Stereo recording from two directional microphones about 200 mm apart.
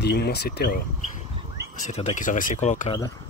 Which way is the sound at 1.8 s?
35° left (ahead or behind).